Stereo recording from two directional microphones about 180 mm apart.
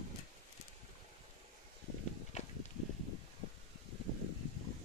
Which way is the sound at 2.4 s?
40° left (ahead or behind).